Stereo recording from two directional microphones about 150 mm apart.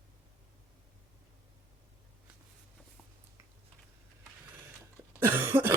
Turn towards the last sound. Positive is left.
turn(degrees=-15)  # may be behind; listen again after turning